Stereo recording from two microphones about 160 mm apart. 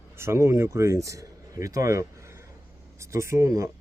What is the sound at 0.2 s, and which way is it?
Speech, 15° right (ahead or behind).